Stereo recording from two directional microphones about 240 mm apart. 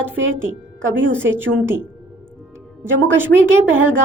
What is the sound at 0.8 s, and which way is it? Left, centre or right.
Speech, right.